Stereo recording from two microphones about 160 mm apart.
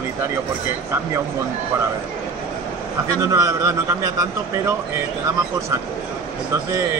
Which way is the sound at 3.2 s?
20° right (ahead or behind).